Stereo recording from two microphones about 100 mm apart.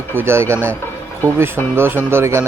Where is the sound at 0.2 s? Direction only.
25° right (ahead or behind).